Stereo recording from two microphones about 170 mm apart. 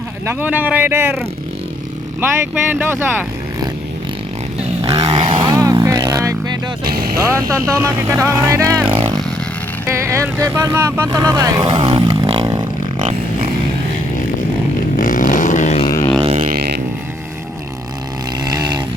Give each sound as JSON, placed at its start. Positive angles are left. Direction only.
{"t": 0.3, "sound": "speech", "side_deg": -10}
{"t": 2.7, "sound": "speech", "side_deg": -10}
{"t": 4.9, "sound": "vehicle", "side_deg": -25}
{"t": 6.8, "sound": "vehicle", "side_deg": -60}
{"t": 7.3, "sound": "speech", "side_deg": -15}
{"t": 8.9, "sound": "a sound", "side_deg": -30}
{"t": 9.8, "sound": "speech", "side_deg": -15}
{"t": 11.7, "sound": "a sound", "side_deg": -30}
{"t": 14.9, "sound": "a sound", "side_deg": 50}
{"t": 16.2, "sound": "vehicle", "side_deg": -40}
{"t": 16.5, "sound": "vehicle", "side_deg": -65}
{"t": 18.4, "sound": "a sound", "side_deg": -25}